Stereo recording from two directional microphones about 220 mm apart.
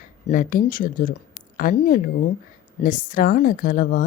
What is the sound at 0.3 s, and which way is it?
Speech, 40° left (ahead or behind).